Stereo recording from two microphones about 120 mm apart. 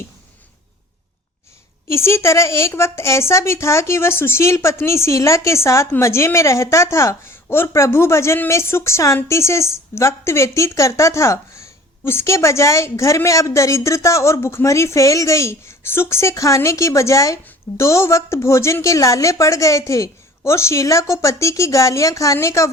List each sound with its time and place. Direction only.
1.9 s a woman's voice: 20° left (ahead or behind)